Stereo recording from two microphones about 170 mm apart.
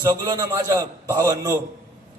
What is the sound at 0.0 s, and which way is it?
A man's voice, 20° right (ahead or behind).